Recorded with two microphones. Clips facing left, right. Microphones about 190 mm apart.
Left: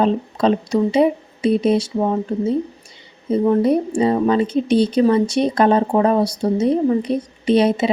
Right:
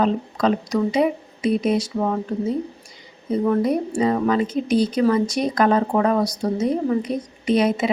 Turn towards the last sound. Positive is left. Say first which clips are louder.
# left 3 dB
turn(degrees=30)  # may be behind; listen again after turning